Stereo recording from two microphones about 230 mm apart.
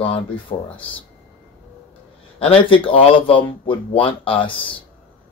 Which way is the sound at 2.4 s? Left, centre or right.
Left.